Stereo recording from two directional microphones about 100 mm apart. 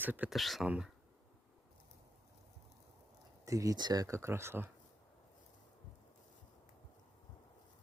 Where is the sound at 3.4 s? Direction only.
35° right (ahead or behind).